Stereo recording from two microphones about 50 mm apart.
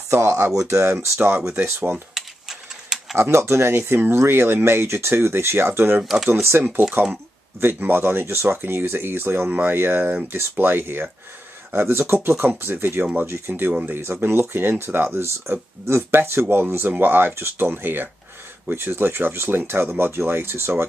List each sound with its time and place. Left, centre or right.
0.1 s speech: right
1.6 s speech: right
2.1 s a sound: centre
3.2 s speech: right
6.0 s speech: centre
7.6 s speech: right
10.2 s speech: right
13.5 s speech: right
14.2 s speech: right
15.1 s speech: right
16.9 s speech: right